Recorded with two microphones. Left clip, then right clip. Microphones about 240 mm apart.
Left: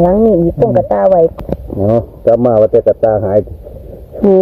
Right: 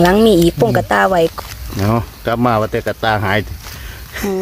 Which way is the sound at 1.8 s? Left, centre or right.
Right.